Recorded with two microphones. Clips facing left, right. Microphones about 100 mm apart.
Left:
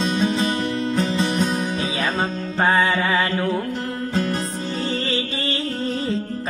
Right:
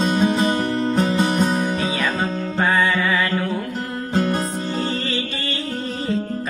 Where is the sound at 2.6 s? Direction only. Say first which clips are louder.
Left 1 dB; 30° left (ahead or behind).